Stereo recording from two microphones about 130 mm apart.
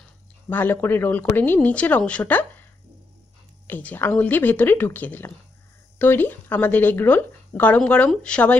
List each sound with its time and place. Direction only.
0.5 s speech: 15° left (ahead or behind)
3.6 s speech: 15° left (ahead or behind)